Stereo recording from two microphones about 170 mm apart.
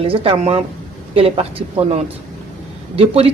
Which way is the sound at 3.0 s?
35° right (ahead or behind).